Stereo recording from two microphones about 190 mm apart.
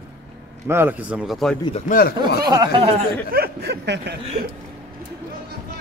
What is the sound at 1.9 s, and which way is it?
Speech, 50° left (ahead or behind).